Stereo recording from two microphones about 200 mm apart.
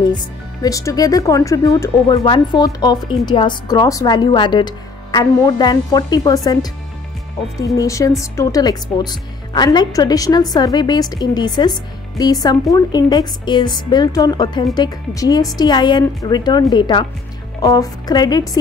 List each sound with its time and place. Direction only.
0.1 s a woman's voice: 20° left (ahead or behind)